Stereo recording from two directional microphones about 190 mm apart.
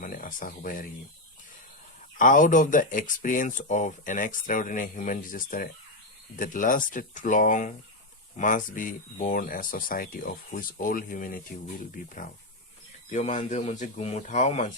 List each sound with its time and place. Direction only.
0.0 s speech: 45° left (ahead or behind)
2.1 s speech: 45° left (ahead or behind)